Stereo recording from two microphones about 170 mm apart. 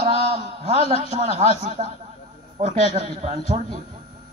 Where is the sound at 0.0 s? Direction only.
35° right (ahead or behind).